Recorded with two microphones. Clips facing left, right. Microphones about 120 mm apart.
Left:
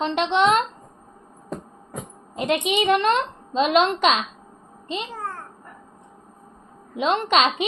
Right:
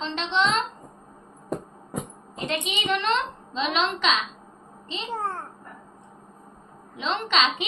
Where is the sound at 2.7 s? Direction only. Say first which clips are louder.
Left 6 dB; 50° left (ahead or behind).